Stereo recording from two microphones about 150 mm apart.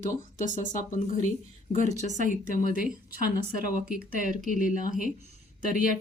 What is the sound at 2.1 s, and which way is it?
Speech, 60° right (ahead or behind).